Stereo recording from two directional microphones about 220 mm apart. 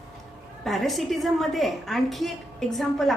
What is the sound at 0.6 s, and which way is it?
A woman's voice, centre (ahead or behind).